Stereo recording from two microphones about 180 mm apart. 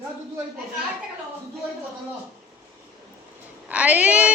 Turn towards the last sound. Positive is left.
turn(degrees=-5)  # may be behind; listen again after turning